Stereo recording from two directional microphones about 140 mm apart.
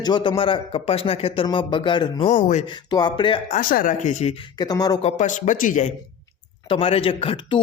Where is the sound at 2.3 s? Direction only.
60° left (ahead or behind).